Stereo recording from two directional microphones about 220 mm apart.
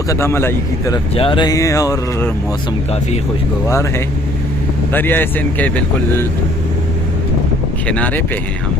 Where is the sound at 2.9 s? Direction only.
30° left (ahead or behind).